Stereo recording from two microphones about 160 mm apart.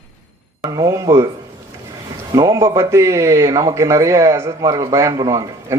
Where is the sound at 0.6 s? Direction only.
20° right (ahead or behind).